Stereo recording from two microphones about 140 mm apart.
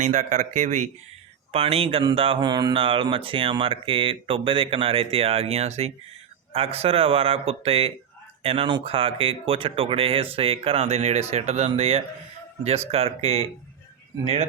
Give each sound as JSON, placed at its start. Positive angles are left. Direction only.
{"t": 0.0, "sound": "speech", "side_deg": -60}
{"t": 1.5, "sound": "a man's voice", "side_deg": -45}